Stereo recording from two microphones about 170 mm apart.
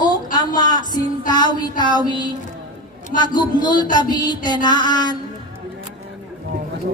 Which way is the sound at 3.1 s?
25° left (ahead or behind).